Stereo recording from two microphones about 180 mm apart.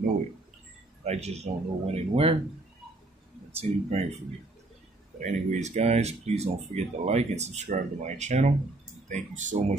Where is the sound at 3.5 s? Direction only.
35° right (ahead or behind).